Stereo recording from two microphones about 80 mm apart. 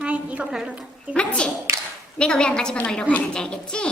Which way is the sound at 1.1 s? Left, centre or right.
Centre.